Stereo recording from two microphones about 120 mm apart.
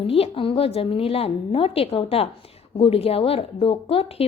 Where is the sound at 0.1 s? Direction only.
50° left (ahead or behind).